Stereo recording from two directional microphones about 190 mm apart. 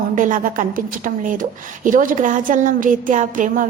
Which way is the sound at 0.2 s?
45° right (ahead or behind).